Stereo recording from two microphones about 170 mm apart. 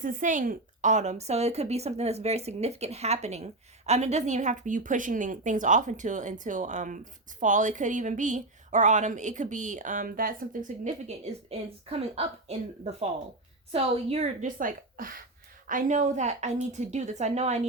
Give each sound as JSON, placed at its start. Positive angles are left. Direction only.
{"t": 0.0, "sound": "a woman's voice", "side_deg": -50}